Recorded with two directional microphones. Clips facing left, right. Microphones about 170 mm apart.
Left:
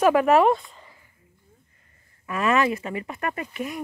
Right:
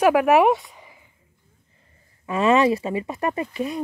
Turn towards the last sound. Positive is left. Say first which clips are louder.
# right 5 dB
turn(degrees=-30)  # may be behind; listen again after turning